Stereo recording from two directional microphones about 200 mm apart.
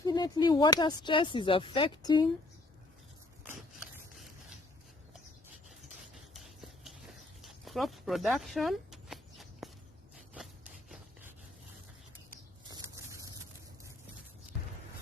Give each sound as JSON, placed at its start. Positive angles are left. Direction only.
{"t": 0.0, "sound": "speech", "side_deg": 20}
{"t": 6.3, "sound": "a sound", "side_deg": 0}
{"t": 10.3, "sound": "rub", "side_deg": 0}
{"t": 12.7, "sound": "vehicle", "side_deg": -15}